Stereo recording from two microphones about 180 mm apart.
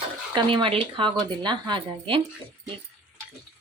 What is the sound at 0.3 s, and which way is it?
Speech, 25° right (ahead or behind).